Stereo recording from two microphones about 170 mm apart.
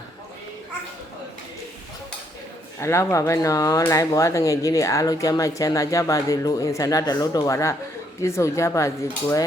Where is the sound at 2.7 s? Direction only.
15° left (ahead or behind).